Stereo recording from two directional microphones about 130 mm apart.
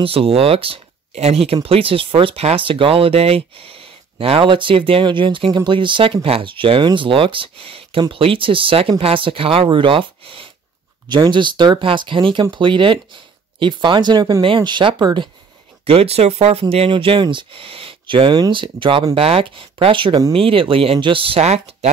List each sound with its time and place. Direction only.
0.0 s speech: 45° right (ahead or behind)
15.8 s speech: 50° right (ahead or behind)